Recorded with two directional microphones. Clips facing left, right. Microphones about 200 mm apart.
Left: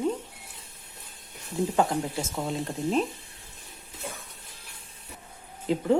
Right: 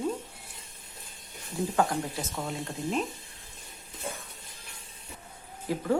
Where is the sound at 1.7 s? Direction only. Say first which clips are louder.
Left 1 dB; 25° left (ahead or behind).